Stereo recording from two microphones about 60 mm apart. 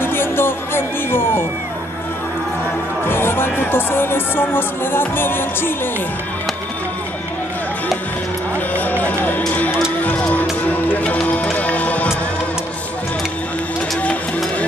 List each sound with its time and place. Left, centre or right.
0.0 s music: left
3.1 s speech: left
8.7 s music: left